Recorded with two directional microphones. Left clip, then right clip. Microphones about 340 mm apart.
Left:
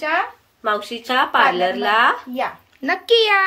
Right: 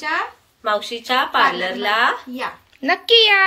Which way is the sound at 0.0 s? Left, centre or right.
Left.